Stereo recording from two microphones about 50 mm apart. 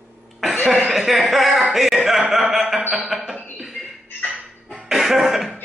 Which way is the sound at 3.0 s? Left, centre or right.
Centre.